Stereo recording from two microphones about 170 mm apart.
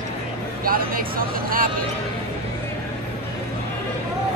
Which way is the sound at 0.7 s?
55° right (ahead or behind).